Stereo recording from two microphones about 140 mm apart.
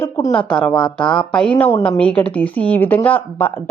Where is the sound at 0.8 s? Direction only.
35° left (ahead or behind).